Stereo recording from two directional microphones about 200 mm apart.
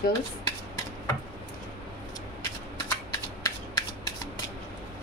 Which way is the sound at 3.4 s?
20° left (ahead or behind).